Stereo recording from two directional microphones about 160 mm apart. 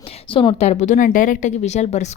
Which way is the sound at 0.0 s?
35° left (ahead or behind).